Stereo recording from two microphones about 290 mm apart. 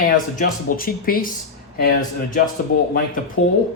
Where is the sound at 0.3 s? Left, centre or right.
Left.